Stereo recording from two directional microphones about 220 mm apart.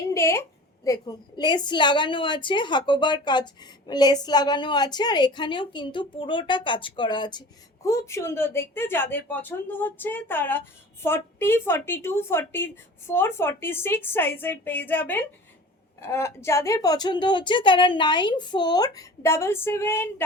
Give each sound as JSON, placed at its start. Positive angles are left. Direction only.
{"t": 0.1, "sound": "a woman's voice", "side_deg": 10}